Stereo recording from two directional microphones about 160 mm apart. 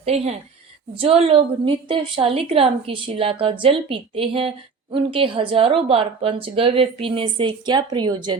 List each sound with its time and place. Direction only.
0.0 s a woman's voice: 40° right (ahead or behind)